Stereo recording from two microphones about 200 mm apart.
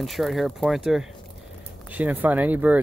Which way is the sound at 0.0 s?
Centre (ahead or behind).